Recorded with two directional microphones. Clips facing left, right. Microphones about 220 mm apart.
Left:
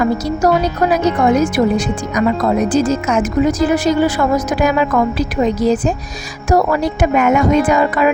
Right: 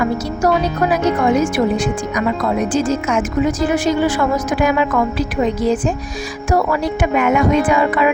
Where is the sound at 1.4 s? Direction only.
40° left (ahead or behind).